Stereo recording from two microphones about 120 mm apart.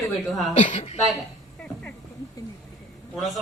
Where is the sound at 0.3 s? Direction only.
Centre (ahead or behind).